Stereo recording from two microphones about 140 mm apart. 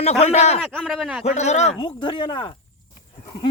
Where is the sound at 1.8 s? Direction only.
35° left (ahead or behind).